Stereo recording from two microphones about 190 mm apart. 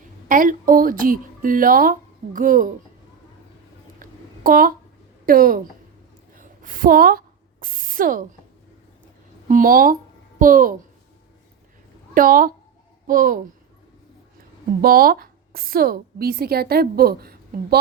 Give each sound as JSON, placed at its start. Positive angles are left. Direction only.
{"t": 0.3, "sound": "a woman's voice", "side_deg": -45}
{"t": 4.0, "sound": "a sound", "side_deg": -50}
{"t": 5.2, "sound": "a woman's voice", "side_deg": -50}
{"t": 6.3, "sound": "a sound", "side_deg": -45}
{"t": 9.5, "sound": "a child's voice", "side_deg": -45}
{"t": 12.1, "sound": "a woman's voice", "side_deg": -50}
{"t": 14.8, "sound": "a woman's voice", "side_deg": -50}